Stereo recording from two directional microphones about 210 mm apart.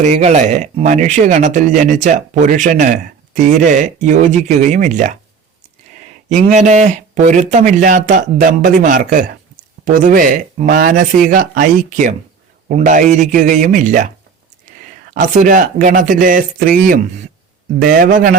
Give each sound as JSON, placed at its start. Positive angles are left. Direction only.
{"t": 0.0, "sound": "speech", "side_deg": -30}
{"t": 6.2, "sound": "speech", "side_deg": -35}
{"t": 15.1, "sound": "a man's voice", "side_deg": -40}